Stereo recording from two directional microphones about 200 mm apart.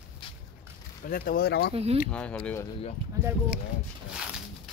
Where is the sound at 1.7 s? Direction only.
30° right (ahead or behind).